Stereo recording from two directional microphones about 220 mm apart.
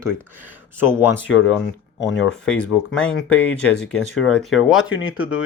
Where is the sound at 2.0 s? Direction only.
55° left (ahead or behind).